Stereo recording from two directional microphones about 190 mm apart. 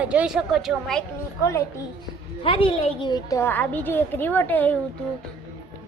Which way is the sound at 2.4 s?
30° left (ahead or behind).